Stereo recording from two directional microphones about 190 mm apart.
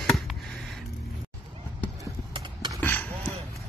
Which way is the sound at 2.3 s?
25° right (ahead or behind).